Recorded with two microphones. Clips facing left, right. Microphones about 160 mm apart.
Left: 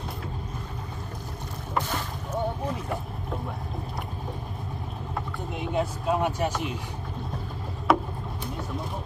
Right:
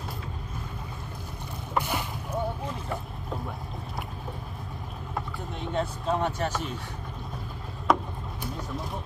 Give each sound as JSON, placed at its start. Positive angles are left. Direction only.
{"t": 1.8, "sound": "boat", "side_deg": -10}
{"t": 5.6, "sound": "vehicle", "side_deg": 10}
{"t": 7.9, "sound": "a sound", "side_deg": 5}